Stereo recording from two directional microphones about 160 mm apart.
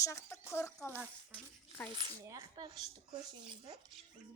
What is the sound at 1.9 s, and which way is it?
Speech, 30° right (ahead or behind).